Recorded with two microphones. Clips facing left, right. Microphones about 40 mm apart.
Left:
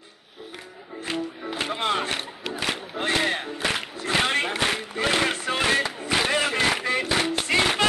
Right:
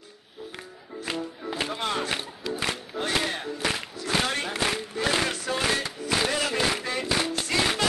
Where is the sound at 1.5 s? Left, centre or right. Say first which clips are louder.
Left 3 dB; left.